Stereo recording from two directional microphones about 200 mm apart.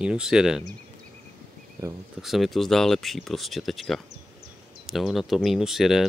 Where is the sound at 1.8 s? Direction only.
15° right (ahead or behind).